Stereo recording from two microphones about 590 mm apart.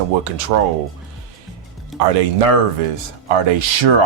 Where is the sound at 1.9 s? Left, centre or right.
Centre.